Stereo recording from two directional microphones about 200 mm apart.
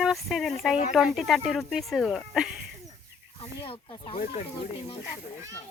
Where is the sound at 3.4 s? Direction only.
25° left (ahead or behind).